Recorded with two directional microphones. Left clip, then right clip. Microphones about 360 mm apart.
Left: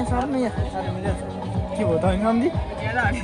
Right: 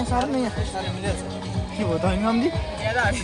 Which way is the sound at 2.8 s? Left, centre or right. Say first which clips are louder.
Right 1 dB; right.